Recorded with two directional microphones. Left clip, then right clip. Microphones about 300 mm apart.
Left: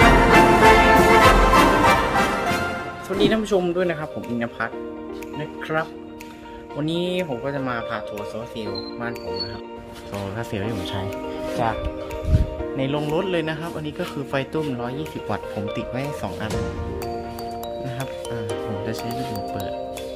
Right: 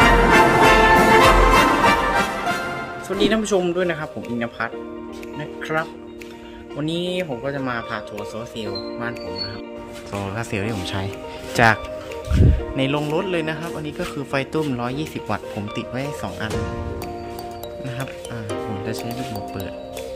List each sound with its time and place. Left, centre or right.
0.0 s music: centre
3.2 s speech: centre
6.8 s a man's voice: centre
10.1 s speech: centre
11.6 s speech: right
12.7 s speech: centre
13.1 s a man's voice: centre